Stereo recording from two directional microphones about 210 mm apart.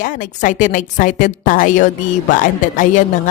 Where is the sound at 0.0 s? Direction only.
35° left (ahead or behind).